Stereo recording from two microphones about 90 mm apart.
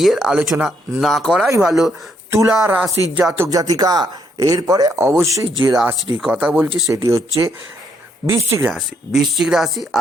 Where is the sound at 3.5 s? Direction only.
40° right (ahead or behind).